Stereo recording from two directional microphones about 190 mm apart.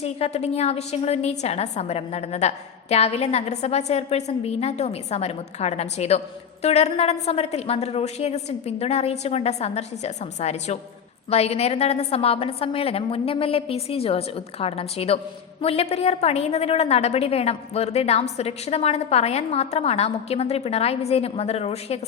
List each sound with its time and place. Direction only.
0.0 s a woman's voice: 35° left (ahead or behind)